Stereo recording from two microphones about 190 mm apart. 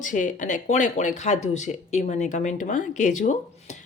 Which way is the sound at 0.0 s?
40° left (ahead or behind).